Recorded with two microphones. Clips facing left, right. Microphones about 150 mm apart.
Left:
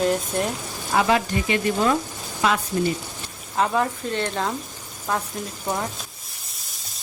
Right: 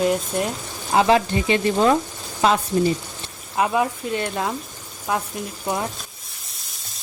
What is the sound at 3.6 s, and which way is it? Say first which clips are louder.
Speech: right 1 dB; 10° right (ahead or behind).